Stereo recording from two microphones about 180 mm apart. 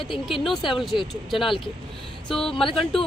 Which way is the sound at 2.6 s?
30° left (ahead or behind).